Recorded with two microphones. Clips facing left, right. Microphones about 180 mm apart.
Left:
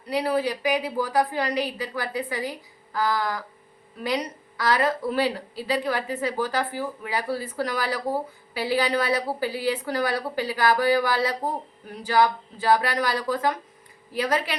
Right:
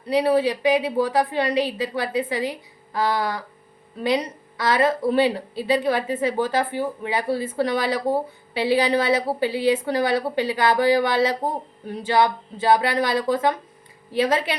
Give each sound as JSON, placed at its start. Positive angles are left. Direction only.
{"t": 0.1, "sound": "a woman's voice", "side_deg": -25}